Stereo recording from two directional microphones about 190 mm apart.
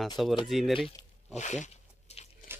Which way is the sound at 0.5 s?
Centre (ahead or behind).